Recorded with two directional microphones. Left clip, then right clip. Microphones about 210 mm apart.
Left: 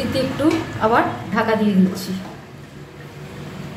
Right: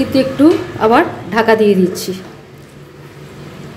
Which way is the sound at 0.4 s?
30° right (ahead or behind).